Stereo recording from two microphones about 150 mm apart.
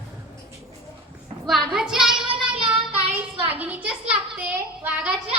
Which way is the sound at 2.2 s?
35° right (ahead or behind).